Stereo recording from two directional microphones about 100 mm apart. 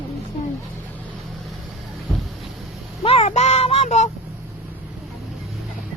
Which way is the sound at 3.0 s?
75° left (ahead or behind).